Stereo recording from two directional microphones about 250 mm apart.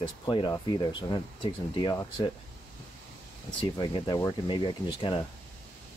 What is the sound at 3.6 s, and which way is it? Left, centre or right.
Speech, centre.